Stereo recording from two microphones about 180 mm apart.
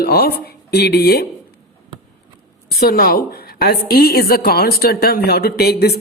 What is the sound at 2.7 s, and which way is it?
A woman's voice, 55° left (ahead or behind).